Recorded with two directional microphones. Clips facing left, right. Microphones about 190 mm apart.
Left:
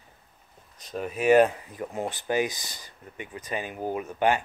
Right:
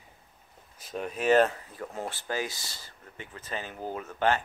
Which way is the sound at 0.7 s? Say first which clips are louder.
Left 2 dB; centre (ahead or behind).